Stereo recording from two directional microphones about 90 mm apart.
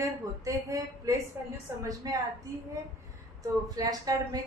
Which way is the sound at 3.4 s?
40° right (ahead or behind).